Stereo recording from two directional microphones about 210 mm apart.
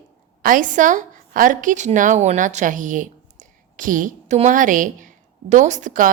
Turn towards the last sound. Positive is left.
turn(degrees=-40)  # may be behind; listen again after turning